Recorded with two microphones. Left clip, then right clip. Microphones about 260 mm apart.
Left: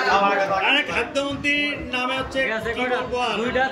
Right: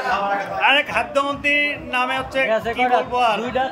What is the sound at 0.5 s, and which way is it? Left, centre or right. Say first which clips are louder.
Speech: right 3 dB; centre.